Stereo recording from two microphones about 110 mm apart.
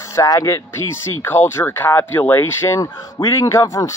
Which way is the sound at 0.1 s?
30° left (ahead or behind).